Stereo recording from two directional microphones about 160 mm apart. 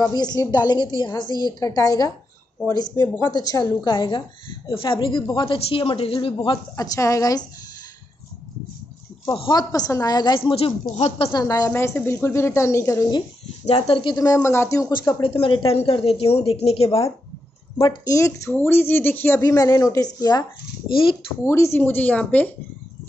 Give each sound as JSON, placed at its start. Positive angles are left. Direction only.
{"t": 0.0, "sound": "a woman's voice", "side_deg": 25}
{"t": 9.2, "sound": "a woman's voice", "side_deg": 30}
{"t": 11.3, "sound": "a woman's voice", "side_deg": 20}
{"t": 13.7, "sound": "a woman's voice", "side_deg": 40}
{"t": 17.7, "sound": "a woman's voice", "side_deg": 20}
{"t": 21.5, "sound": "a woman's voice", "side_deg": 15}